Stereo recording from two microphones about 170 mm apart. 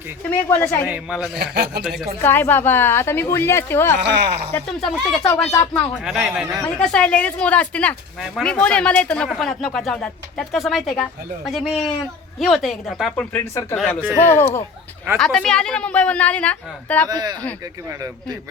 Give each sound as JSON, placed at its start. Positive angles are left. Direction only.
{"t": 0.3, "sound": "a woman's voice", "side_deg": 15}
{"t": 0.9, "sound": "speech", "side_deg": -5}
{"t": 1.4, "sound": "a man's voice", "side_deg": -70}
{"t": 1.8, "sound": "speech", "side_deg": 0}
{"t": 2.2, "sound": "a woman's voice", "side_deg": 10}
{"t": 4.0, "sound": "speech", "side_deg": -85}
{"t": 4.5, "sound": "a woman's voice", "side_deg": 10}
{"t": 5.7, "sound": "speech", "side_deg": 0}
{"t": 13.3, "sound": "a woman's voice", "side_deg": 15}
{"t": 17.1, "sound": "speech", "side_deg": -25}